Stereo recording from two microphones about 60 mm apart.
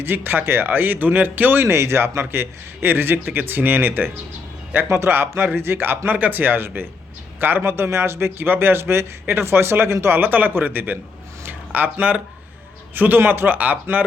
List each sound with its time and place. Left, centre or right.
0.0 s a man's voice: right
11.4 s a sound: right
12.9 s speech: right